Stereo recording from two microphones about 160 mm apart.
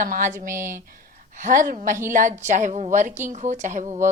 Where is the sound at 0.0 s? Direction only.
55° right (ahead or behind).